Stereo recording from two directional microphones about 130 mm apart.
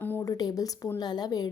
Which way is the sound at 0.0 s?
15° left (ahead or behind).